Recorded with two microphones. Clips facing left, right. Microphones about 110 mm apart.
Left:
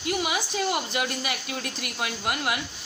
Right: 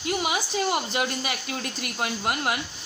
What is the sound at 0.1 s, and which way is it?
Speech, 30° right (ahead or behind).